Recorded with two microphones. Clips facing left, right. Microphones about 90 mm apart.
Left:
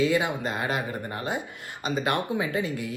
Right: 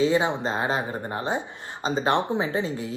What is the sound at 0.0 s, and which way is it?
Speech, 30° right (ahead or behind).